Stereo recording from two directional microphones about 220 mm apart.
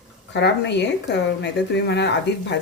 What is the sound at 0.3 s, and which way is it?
Speech, 50° left (ahead or behind).